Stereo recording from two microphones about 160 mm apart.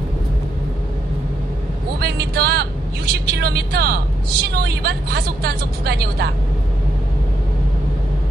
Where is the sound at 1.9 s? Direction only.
85° right.